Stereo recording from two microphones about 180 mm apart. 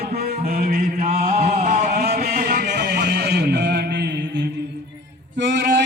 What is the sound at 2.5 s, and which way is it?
Music, 65° right (ahead or behind).